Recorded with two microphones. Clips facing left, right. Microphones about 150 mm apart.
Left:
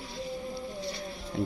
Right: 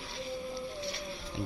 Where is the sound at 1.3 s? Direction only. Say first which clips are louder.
Left 7 dB; 45° left (ahead or behind).